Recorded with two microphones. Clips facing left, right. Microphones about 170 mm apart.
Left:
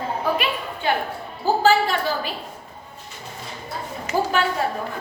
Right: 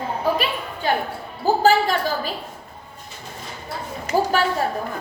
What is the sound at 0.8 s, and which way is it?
Basketball bounce, 40° right (ahead or behind).